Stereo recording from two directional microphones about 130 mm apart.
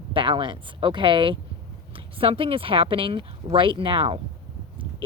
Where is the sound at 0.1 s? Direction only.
40° right (ahead or behind).